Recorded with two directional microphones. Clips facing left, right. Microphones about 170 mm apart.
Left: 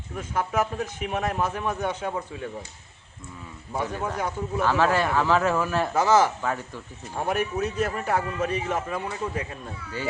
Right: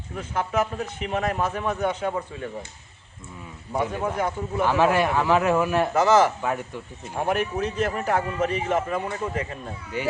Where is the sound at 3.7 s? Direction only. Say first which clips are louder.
Right 3 dB; 15° right (ahead or behind).